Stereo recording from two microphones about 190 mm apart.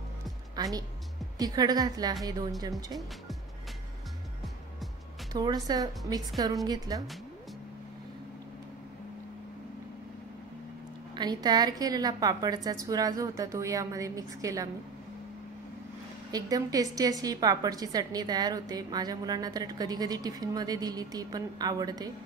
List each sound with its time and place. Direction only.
0.6 s a woman's voice: 20° right (ahead or behind)
5.3 s a woman's voice: 20° right (ahead or behind)
11.1 s a woman's voice: 20° right (ahead or behind)
16.3 s a woman's voice: 20° right (ahead or behind)